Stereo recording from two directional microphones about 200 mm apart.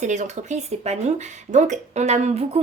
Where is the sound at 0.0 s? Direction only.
35° right (ahead or behind).